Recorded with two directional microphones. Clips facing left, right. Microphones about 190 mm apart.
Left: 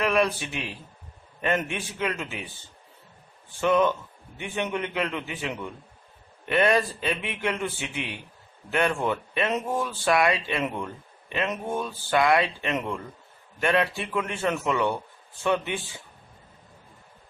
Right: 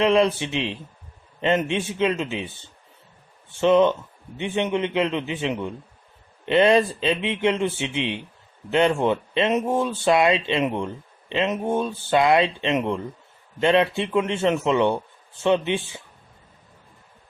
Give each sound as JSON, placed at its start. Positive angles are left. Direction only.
{"t": 0.0, "sound": "speech", "side_deg": -25}
{"t": 3.6, "sound": "speech", "side_deg": -25}